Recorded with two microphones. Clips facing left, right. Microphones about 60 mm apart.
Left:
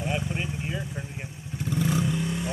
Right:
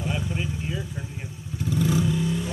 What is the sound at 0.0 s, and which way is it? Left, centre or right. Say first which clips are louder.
Vehicle: even; left.